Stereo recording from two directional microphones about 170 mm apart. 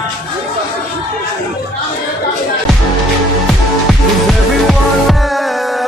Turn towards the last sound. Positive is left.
turn(degrees=0)  # may be behind; listen again after turning